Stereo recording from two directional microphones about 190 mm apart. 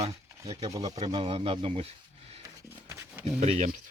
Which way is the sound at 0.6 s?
20° right (ahead or behind).